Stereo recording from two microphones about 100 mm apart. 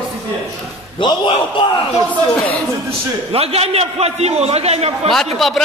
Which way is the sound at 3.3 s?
80° right.